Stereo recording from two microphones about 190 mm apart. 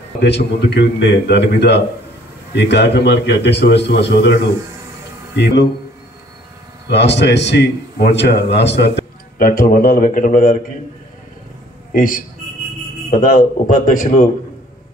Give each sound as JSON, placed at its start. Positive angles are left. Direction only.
{"t": 0.2, "sound": "a man's voice", "side_deg": 65}
{"t": 6.9, "sound": "a man's voice", "side_deg": 65}
{"t": 11.9, "sound": "a man's voice", "side_deg": 45}